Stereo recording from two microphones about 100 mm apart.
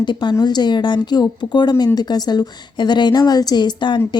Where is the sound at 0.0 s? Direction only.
50° left (ahead or behind).